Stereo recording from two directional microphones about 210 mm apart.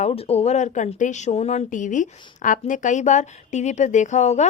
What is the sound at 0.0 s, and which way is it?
A woman's voice, 30° left (ahead or behind).